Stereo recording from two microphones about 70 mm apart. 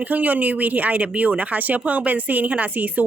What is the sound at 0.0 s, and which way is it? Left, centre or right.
A woman's voice, right.